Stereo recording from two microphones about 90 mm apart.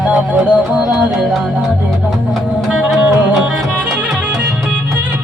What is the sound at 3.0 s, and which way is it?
Music, 10° right (ahead or behind).